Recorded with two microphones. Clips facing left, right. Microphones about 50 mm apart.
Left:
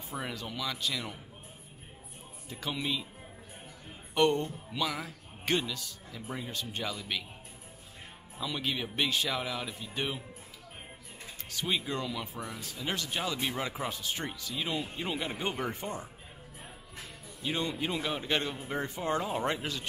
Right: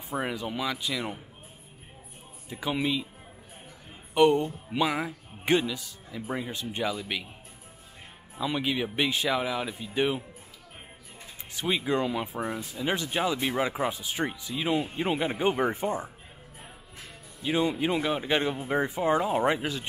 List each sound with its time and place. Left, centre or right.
0.1 s speech: right
2.5 s speech: centre
4.1 s speech: centre
4.6 s speech: right
8.5 s speech: centre
11.5 s speech: centre
12.0 s speech: right
12.6 s speech: centre
14.7 s speech: right
17.4 s speech: centre